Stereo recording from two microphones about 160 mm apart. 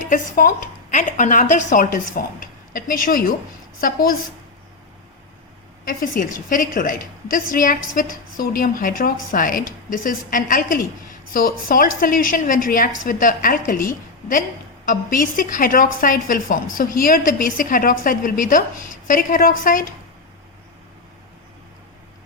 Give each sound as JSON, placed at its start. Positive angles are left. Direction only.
{"t": 0.1, "sound": "a woman's voice", "side_deg": 55}
{"t": 5.8, "sound": "a woman's voice", "side_deg": 60}